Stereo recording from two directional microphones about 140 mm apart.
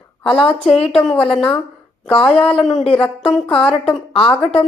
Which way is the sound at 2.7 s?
10° left (ahead or behind).